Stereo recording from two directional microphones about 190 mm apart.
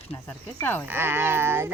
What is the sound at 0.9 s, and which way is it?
Speech, 10° right (ahead or behind).